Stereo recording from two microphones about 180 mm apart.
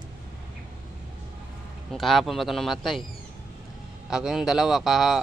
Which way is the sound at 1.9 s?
Centre (ahead or behind).